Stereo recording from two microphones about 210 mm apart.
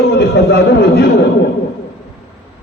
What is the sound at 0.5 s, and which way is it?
Speech, 50° left (ahead or behind).